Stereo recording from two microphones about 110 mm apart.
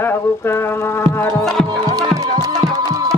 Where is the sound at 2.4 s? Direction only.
35° right (ahead or behind).